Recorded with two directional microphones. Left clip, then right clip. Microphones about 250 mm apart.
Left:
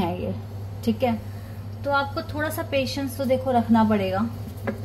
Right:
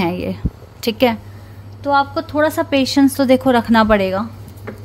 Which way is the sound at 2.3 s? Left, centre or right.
Right.